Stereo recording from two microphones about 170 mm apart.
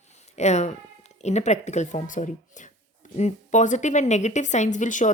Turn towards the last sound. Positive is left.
turn(degrees=45)  # may be behind; listen again after turning